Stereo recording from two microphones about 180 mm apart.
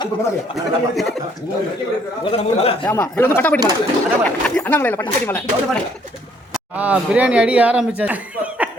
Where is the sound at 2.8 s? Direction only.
10° left (ahead or behind).